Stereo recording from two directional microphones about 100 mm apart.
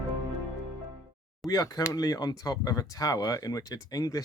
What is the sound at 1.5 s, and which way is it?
Speech, 35° left (ahead or behind).